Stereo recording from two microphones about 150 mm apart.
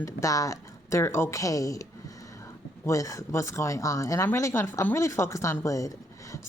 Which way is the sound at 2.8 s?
20° left (ahead or behind).